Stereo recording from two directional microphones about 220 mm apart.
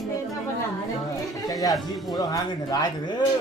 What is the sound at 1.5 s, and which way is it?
Speech, 15° left (ahead or behind).